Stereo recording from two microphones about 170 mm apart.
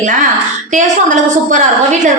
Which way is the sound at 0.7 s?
45° right (ahead or behind).